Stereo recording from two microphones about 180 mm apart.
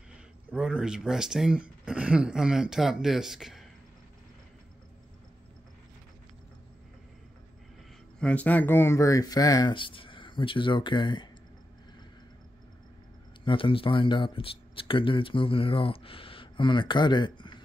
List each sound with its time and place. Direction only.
0.5 s speech: 5° right (ahead or behind)
8.2 s speech: 5° left (ahead or behind); by 11.2 s 25° left (ahead or behind)
13.5 s speech: 30° left (ahead or behind)